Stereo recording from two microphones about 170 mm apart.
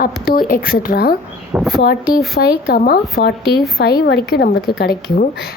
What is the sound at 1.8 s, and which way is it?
A woman's voice, 60° left (ahead or behind).